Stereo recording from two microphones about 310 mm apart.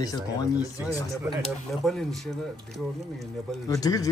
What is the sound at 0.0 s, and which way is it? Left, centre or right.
Speech, centre.